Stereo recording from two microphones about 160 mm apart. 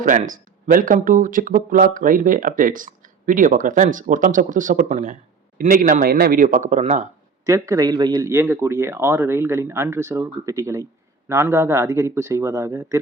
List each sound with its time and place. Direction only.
0.0 s speech: 55° right (ahead or behind)
5.5 s speech: 60° right (ahead or behind)
7.4 s speech: 20° right (ahead or behind)